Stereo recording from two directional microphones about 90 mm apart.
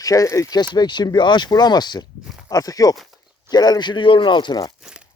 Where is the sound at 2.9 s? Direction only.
Centre (ahead or behind).